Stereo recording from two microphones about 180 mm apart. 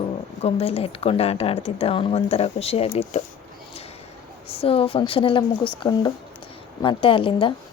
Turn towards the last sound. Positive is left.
turn(degrees=30)  # may be behind; listen again after turning